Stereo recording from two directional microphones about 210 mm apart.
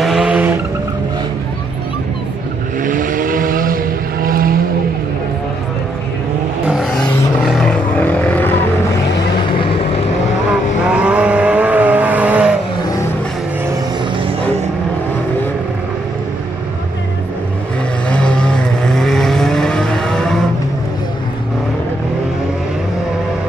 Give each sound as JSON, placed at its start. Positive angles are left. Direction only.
{"t": 0.0, "sound": "vehicle", "side_deg": 0}
{"t": 2.8, "sound": "vehicle", "side_deg": -40}
{"t": 7.4, "sound": "vehicle", "side_deg": 5}
{"t": 10.9, "sound": "vehicle", "side_deg": -5}
{"t": 13.7, "sound": "vehicle", "side_deg": -25}
{"t": 18.1, "sound": "vehicle", "side_deg": 5}